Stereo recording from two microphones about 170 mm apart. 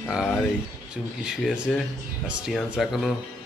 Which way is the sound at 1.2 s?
Centre (ahead or behind).